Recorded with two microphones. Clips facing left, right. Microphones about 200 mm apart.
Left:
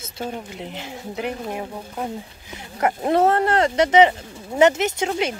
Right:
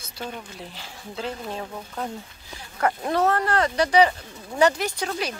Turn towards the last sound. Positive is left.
turn(degrees=25)  # may be behind; listen again after turning